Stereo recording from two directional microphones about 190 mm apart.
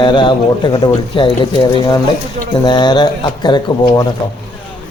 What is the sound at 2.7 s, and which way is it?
A man's voice, 25° left (ahead or behind).